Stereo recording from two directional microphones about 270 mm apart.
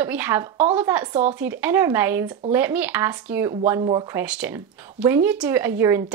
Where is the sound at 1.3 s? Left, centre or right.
Centre.